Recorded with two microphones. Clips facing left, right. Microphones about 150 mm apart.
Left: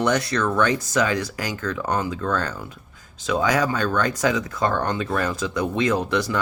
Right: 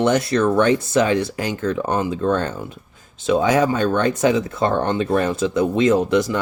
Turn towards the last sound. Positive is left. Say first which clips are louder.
# right 6 dB
turn(degrees=-20)  # may be behind; listen again after turning